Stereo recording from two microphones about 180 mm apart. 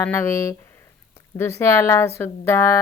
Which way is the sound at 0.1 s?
15° left (ahead or behind).